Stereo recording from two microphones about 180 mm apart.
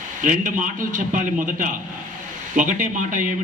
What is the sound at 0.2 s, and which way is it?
A man's voice, 45° right (ahead or behind).